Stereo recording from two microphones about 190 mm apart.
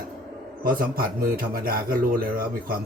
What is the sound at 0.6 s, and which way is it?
A man's voice, 50° right (ahead or behind).